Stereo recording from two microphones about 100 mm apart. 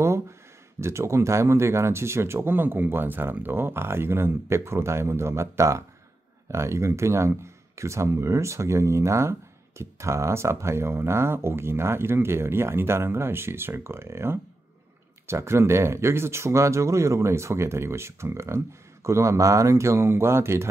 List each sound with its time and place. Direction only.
0.7 s speech: 25° right (ahead or behind)